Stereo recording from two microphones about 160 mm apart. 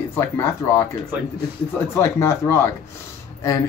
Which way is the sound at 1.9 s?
15° left (ahead or behind).